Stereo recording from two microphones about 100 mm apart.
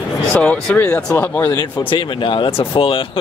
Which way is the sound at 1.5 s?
50° left (ahead or behind).